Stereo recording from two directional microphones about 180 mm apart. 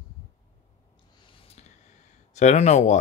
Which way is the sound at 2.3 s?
40° left (ahead or behind).